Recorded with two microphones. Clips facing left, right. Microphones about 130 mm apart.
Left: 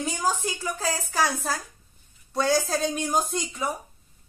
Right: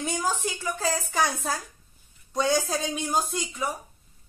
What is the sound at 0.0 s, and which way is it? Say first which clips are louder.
A child's voice: left 1 dB; 10° left (ahead or behind).